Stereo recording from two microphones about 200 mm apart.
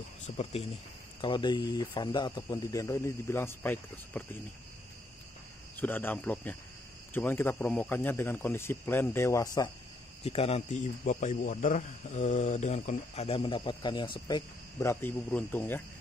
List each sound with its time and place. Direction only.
0.4 s a man's voice: 30° left (ahead or behind); by 4.2 s 10° left (ahead or behind)
5.8 s speech: 10° left (ahead or behind)
10.2 s a man's voice: 30° left (ahead or behind); by 15.8 s 10° left (ahead or behind)